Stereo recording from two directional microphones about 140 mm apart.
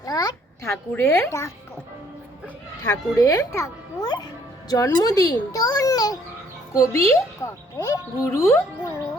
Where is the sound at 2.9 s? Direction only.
25° left (ahead or behind).